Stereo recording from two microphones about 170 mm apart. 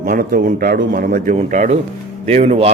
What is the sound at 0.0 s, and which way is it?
A man's voice, 55° right (ahead or behind).